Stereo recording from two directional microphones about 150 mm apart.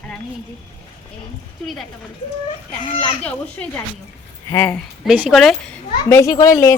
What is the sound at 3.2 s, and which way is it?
A woman's voice, 10° left (ahead or behind).